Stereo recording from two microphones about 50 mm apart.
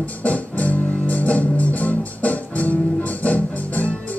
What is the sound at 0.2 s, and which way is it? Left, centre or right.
Music, left.